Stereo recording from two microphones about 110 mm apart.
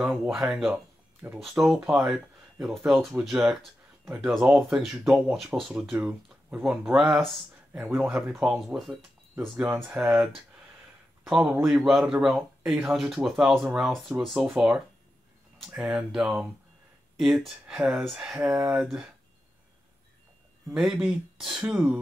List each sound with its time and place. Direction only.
0.0 s speech: 5° right (ahead or behind)
11.2 s speech: 5° right (ahead or behind)
17.5 s speech: 5° right (ahead or behind)
18.8 s speech: 5° right (ahead or behind)
20.7 s speech: 5° right (ahead or behind)